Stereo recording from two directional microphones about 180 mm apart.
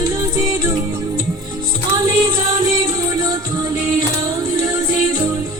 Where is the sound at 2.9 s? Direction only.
20° right (ahead or behind).